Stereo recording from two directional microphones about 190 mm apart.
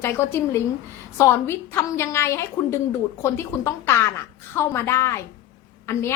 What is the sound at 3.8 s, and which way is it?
Speech, 15° left (ahead or behind).